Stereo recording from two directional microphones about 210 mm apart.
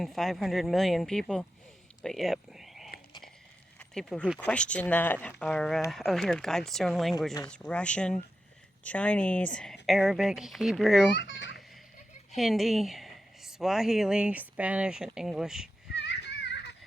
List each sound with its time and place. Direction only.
0.0 s a woman's voice: centre (ahead or behind)
2.0 s a sound: centre (ahead or behind)
3.8 s a woman's voice: 5° left (ahead or behind)
11.2 s a child's voice: 60° left (ahead or behind)
12.4 s a woman's voice: centre (ahead or behind)
16.0 s children playing: 55° left (ahead or behind)